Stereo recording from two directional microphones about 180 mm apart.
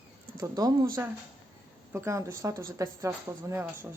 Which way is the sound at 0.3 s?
20° right (ahead or behind).